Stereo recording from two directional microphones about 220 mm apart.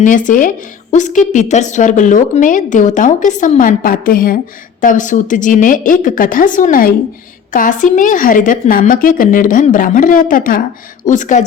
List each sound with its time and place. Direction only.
0.0 s a woman's voice: 35° left (ahead or behind)